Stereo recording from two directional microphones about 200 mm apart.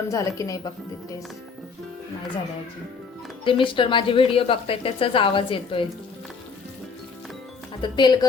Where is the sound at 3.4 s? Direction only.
25° left (ahead or behind).